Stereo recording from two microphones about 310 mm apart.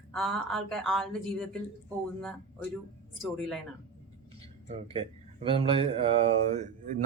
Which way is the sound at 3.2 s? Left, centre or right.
Centre.